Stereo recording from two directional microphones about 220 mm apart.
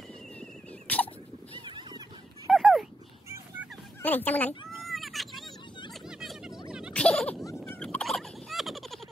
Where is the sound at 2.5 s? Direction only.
Centre (ahead or behind).